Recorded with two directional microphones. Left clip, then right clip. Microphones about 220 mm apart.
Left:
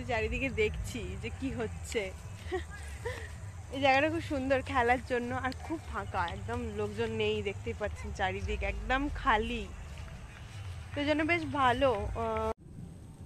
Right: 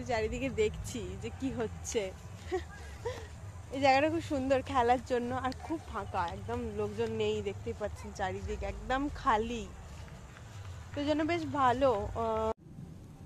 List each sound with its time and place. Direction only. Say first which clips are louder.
0.1 s speech: left 1 dB; centre (ahead or behind); by 9.0 s 20° left (ahead or behind)
9.2 s speech: even; 10° left (ahead or behind)
11.0 s speech: left 2 dB; 15° left (ahead or behind); by 12.5 s 5° right (ahead or behind)